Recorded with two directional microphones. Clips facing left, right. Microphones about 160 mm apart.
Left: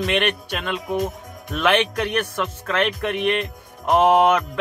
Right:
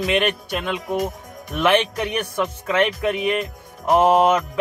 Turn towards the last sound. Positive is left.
turn(degrees=-5)  # may be behind; listen again after turning